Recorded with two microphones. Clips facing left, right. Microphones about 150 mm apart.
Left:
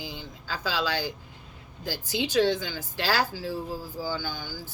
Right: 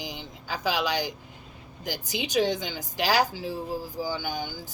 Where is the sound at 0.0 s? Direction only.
15° right (ahead or behind).